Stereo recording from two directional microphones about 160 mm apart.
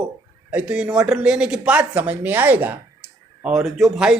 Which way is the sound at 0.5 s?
5° right (ahead or behind).